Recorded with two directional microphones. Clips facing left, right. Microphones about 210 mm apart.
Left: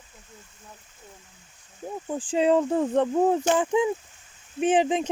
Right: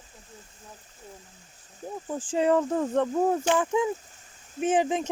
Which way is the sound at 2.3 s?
20° left (ahead or behind).